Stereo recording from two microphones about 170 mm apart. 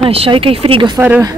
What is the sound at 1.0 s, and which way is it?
Speech, 15° right (ahead or behind).